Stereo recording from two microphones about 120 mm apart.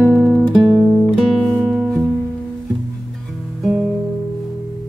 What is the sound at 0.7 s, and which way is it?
Music, 15° right (ahead or behind).